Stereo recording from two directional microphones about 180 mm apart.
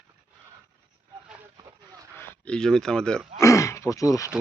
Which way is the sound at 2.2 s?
5° left (ahead or behind).